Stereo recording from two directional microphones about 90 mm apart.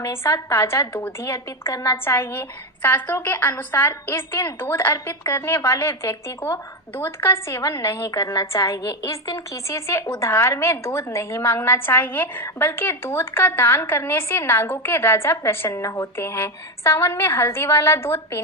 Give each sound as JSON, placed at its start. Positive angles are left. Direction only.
{"t": 0.1, "sound": "a woman's voice", "side_deg": 30}